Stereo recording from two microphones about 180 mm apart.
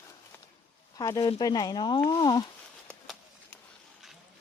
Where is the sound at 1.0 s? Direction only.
20° left (ahead or behind).